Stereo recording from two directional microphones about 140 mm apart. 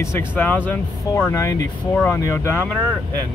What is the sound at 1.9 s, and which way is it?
Speech, 10° left (ahead or behind).